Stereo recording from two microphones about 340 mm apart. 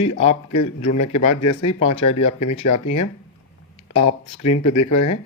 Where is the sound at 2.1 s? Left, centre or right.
Centre.